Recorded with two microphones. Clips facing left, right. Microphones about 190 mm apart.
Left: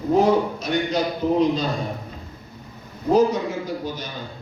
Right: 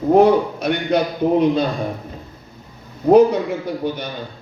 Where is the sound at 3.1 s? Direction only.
60° right (ahead or behind).